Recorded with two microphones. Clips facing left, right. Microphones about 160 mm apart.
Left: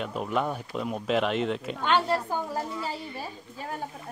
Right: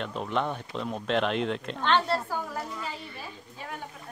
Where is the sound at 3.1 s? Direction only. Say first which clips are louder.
Left 4 dB; 40° left (ahead or behind).